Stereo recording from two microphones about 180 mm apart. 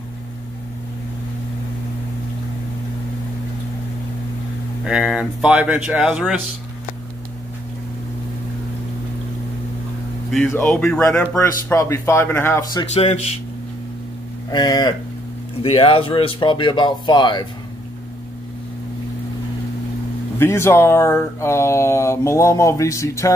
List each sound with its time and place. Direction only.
4.8 s speech: 5° right (ahead or behind)
10.3 s speech: 10° left (ahead or behind)
12.9 s a man's voice: 35° left (ahead or behind)
14.5 s speech: 25° left (ahead or behind)
20.3 s speech: 15° left (ahead or behind)